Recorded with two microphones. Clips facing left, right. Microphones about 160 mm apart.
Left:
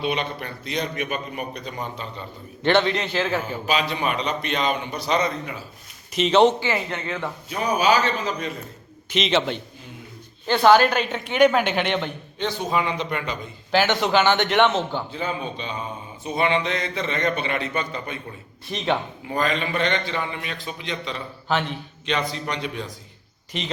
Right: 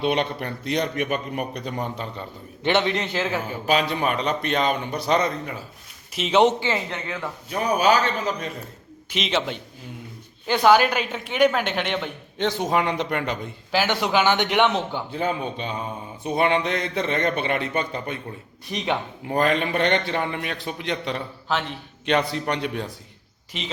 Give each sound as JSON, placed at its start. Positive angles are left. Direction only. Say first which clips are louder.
{"t": 0.0, "sound": "a man's voice", "louder": "right 3 dB", "side_deg": -60}
{"t": 2.6, "sound": "a man's voice", "louder": "left 2 dB", "side_deg": -15}
{"t": 3.7, "sound": "a man's voice", "louder": "right 2 dB", "side_deg": -50}
{"t": 6.1, "sound": "a woman's voice", "louder": "left 2 dB", "side_deg": -5}
{"t": 6.4, "sound": "a man's voice", "louder": "left 1 dB", "side_deg": -15}
{"t": 7.5, "sound": "a man's voice", "louder": "right 1 dB", "side_deg": -50}
{"t": 9.1, "sound": "a woman's voice", "louder": "left 3 dB", "side_deg": -5}
{"t": 12.4, "sound": "a man's voice", "louder": "right 2 dB", "side_deg": -70}
{"t": 13.7, "sound": "a man's voice", "louder": "left 2 dB", "side_deg": -5}
{"t": 15.1, "sound": "a man's voice", "louder": "right 3 dB", "side_deg": -50}
{"t": 19.3, "sound": "a man's voice", "louder": "right 3 dB", "side_deg": -55}
{"t": 21.5, "sound": "a woman's voice", "louder": "left 2 dB", "side_deg": 0}
{"t": 22.0, "sound": "a man's voice", "louder": "right 4 dB", "side_deg": -55}
{"t": 23.5, "sound": "a woman's voice", "louder": "left 3 dB", "side_deg": -5}